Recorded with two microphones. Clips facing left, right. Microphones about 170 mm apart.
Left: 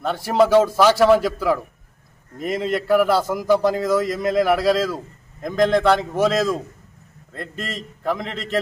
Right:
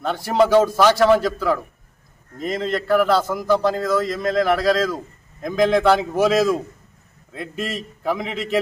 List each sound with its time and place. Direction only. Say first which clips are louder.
0.0 s a man's voice: even; centre (ahead or behind)